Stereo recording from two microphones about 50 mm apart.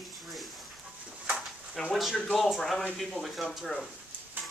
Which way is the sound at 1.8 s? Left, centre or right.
Centre.